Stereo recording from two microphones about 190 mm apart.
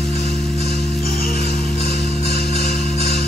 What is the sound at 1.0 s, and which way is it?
Music, 50° left (ahead or behind).